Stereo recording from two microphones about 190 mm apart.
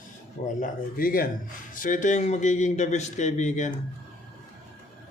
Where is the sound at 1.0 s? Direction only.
50° left (ahead or behind).